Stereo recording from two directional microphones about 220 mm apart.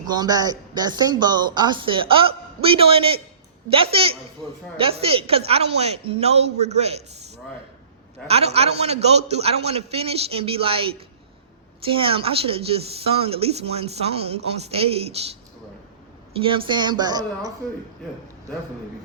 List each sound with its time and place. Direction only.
0.0 s a woman's voice: 20° right (ahead or behind)
8.3 s a woman's voice: 25° right (ahead or behind)
16.4 s a woman's voice: 25° right (ahead or behind)